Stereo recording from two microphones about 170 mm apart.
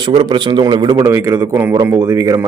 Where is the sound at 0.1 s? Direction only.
25° right (ahead or behind).